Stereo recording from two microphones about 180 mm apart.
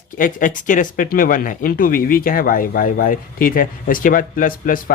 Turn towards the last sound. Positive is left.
turn(degrees=50)  # may be behind; listen again after turning